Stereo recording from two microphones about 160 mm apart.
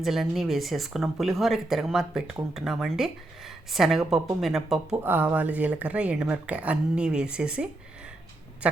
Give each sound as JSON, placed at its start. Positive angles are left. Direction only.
{"t": 0.0, "sound": "speech", "side_deg": 0}
{"t": 5.0, "sound": "speech", "side_deg": -15}